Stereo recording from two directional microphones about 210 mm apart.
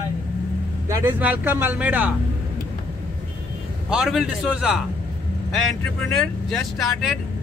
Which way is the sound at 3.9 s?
5° right (ahead or behind).